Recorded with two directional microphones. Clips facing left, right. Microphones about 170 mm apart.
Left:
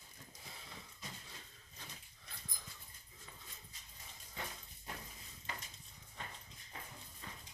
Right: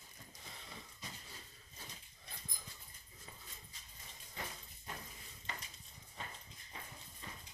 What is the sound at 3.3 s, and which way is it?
Dog, 30° right (ahead or behind).